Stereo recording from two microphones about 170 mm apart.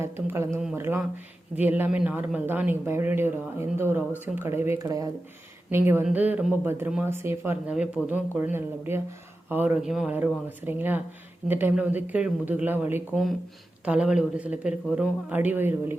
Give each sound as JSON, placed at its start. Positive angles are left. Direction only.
{"t": 0.0, "sound": "speech", "side_deg": -15}